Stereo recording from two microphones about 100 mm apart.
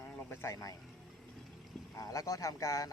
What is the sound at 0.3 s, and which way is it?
Speech, 30° left (ahead or behind).